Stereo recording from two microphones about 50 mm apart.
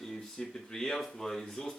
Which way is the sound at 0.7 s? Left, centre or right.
Centre.